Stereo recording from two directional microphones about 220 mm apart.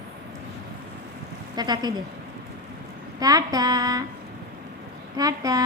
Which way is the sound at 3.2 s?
15° right (ahead or behind).